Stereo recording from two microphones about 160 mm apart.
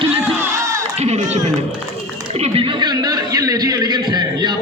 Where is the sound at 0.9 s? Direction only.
45° right (ahead or behind); by 4.5 s 25° right (ahead or behind).